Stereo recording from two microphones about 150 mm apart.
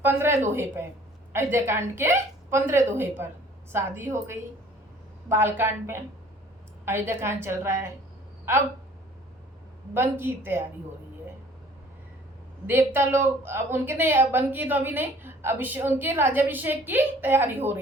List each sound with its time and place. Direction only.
0.0 s a woman's voice: 15° right (ahead or behind)
9.9 s a woman's voice: 15° right (ahead or behind)
12.6 s a woman's voice: 15° right (ahead or behind)